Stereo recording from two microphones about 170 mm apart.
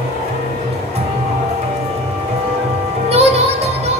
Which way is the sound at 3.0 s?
35° right (ahead or behind).